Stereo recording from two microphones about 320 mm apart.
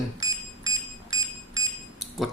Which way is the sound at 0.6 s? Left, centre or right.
Centre.